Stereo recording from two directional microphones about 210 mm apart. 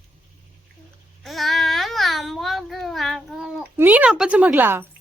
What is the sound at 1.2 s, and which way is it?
Speech, centre (ahead or behind).